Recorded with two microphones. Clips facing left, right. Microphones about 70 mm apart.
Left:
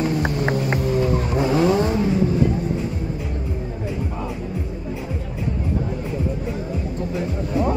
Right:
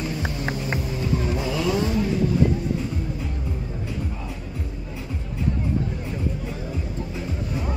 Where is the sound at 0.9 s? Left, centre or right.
Left.